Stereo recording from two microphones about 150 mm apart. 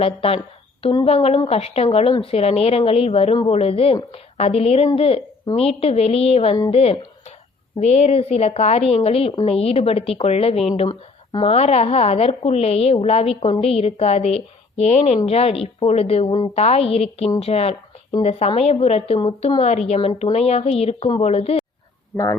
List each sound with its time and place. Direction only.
0.0 s a woman's voice: 40° left (ahead or behind)
10.8 s speech: 30° left (ahead or behind)
11.5 s a woman's voice: 45° left (ahead or behind)